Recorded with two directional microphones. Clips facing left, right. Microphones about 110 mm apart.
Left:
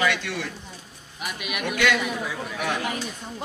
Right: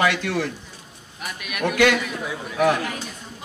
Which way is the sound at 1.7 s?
50° right (ahead or behind).